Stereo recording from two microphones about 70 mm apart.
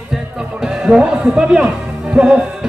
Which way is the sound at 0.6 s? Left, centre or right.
Centre.